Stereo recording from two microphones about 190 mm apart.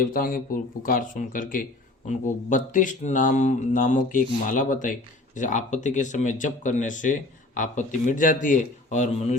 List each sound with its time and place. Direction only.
0.0 s speech: 50° left (ahead or behind)